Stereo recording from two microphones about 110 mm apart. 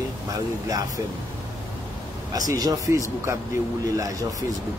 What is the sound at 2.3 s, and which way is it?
A man's voice, 35° right (ahead or behind).